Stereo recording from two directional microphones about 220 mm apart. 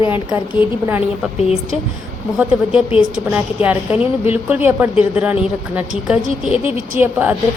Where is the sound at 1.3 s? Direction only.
30° left (ahead or behind).